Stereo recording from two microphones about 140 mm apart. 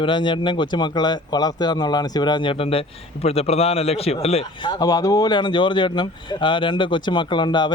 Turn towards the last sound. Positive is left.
turn(degrees=35)  # may be behind; listen again after turning